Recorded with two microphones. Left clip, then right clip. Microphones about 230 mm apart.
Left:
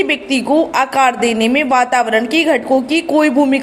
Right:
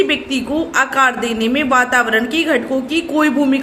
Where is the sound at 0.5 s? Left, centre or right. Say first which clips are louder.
Left 2 dB; left.